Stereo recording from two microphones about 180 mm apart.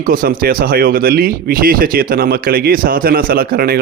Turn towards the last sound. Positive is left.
turn(degrees=-55)  # may be behind; listen again after turning